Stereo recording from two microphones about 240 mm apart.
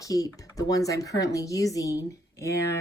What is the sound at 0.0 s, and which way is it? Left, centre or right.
Speech, centre.